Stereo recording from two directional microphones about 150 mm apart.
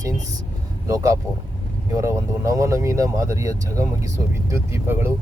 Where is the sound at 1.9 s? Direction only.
20° right (ahead or behind).